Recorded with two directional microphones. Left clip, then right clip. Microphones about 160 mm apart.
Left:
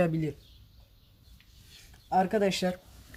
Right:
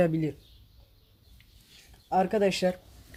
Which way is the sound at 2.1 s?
5° right (ahead or behind).